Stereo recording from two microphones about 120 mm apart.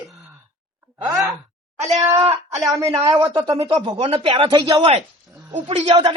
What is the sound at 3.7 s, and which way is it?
Speech, 50° right (ahead or behind).